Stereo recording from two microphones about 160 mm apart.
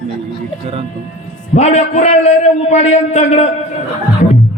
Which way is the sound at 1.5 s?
45° left (ahead or behind).